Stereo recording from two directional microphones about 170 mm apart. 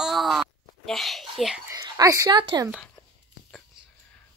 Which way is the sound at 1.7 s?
20° right (ahead or behind).